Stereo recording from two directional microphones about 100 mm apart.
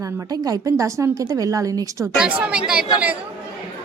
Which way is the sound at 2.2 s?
10° right (ahead or behind).